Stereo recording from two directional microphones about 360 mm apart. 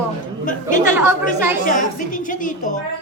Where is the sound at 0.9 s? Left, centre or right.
Centre.